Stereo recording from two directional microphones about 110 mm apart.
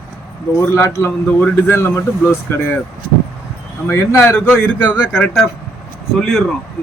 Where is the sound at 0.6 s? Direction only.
25° left (ahead or behind).